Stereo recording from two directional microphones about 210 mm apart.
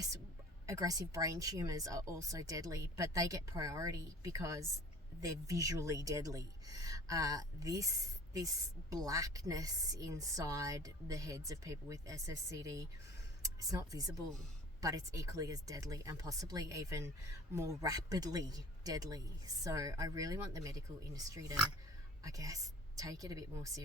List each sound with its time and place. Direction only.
0.7 s speech: 15° right (ahead or behind)
8.9 s speech: 15° right (ahead or behind)